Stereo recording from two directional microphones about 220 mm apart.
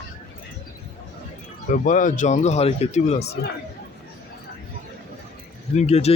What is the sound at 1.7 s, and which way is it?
Speech, 35° left (ahead or behind).